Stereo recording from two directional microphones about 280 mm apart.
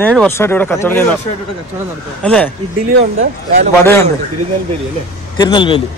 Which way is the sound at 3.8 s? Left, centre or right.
Centre.